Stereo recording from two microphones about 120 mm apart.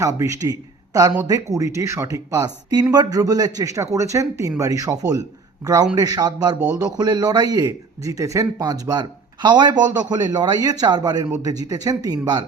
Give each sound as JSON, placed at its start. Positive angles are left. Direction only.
{"t": 0.0, "sound": "a man's voice", "side_deg": -25}